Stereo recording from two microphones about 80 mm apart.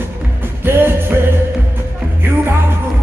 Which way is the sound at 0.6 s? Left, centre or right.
Right.